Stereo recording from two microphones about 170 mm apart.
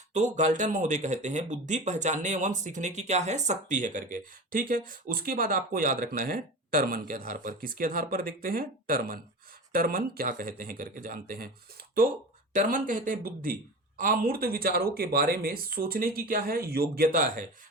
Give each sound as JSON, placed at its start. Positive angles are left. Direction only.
{"t": 0.1, "sound": "speech", "side_deg": -45}
{"t": 12.5, "sound": "speech", "side_deg": -55}